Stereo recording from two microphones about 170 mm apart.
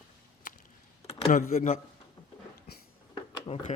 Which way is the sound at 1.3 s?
55° left (ahead or behind).